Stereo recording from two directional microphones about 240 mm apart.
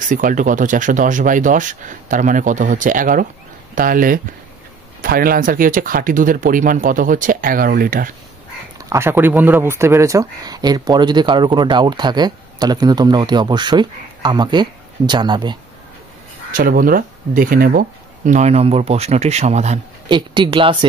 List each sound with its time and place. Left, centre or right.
0.1 s speech: right
8.8 s speech: centre
16.5 s speech: right; by 20.7 s centre